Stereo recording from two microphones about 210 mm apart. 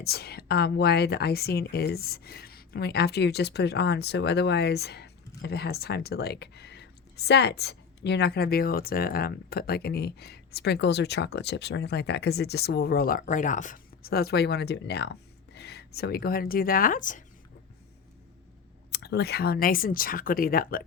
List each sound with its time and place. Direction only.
0.0 s speech: 50° left (ahead or behind)
18.9 s speech: 50° left (ahead or behind)